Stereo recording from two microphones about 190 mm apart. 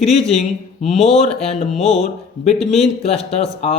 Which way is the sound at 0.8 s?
35° left (ahead or behind).